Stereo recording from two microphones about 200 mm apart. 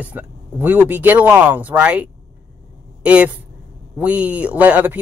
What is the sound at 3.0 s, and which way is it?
Speech, 5° right (ahead or behind).